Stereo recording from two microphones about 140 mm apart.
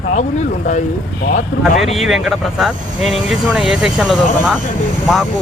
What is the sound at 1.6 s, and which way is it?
Speech, centre (ahead or behind).